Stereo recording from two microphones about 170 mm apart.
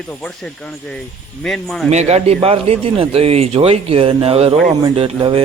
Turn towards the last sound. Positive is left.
turn(degrees=-30)  # may be behind; listen again after turning